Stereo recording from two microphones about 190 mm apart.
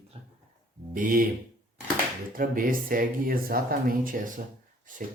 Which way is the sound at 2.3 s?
50° right (ahead or behind).